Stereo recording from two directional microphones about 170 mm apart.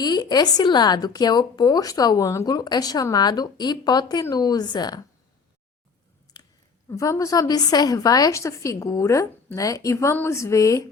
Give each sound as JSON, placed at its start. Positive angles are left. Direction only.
{"t": 0.0, "sound": "speech", "side_deg": 25}
{"t": 6.3, "sound": "chewing", "side_deg": 25}
{"t": 6.9, "sound": "speech", "side_deg": 20}